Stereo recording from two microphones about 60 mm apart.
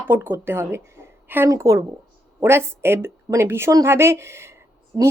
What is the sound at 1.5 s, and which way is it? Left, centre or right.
Speech, right.